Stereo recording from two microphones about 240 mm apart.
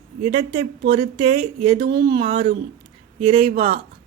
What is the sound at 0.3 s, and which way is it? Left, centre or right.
Speech, right.